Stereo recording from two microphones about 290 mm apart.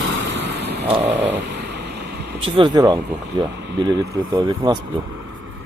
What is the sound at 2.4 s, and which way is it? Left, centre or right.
Speech, centre.